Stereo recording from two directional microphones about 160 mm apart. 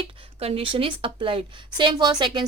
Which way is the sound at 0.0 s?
35° right (ahead or behind).